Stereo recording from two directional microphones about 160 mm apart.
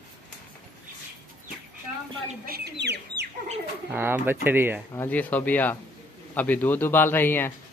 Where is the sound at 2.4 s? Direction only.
80° right.